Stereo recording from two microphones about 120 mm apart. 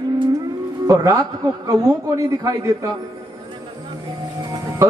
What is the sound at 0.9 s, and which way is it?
A man's voice, 30° right (ahead or behind).